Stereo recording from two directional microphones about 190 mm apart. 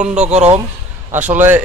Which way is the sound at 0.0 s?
5° right (ahead or behind).